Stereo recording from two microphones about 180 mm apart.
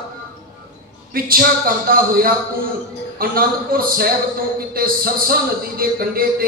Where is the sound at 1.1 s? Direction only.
55° right (ahead or behind).